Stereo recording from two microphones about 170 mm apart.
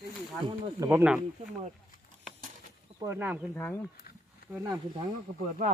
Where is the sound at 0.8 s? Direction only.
15° right (ahead or behind).